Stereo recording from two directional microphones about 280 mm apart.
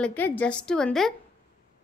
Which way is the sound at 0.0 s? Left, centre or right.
Centre.